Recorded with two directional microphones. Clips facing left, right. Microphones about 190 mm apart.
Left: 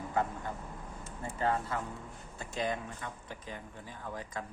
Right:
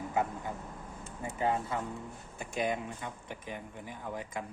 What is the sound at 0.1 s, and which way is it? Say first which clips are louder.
Speech: even; 10° right (ahead or behind).